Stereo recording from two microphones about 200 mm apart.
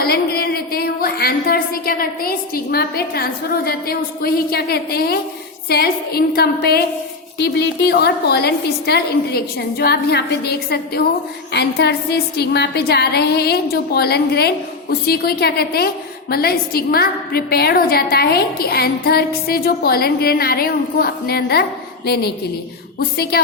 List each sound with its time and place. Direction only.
0.0 s a woman's voice: 50° left (ahead or behind)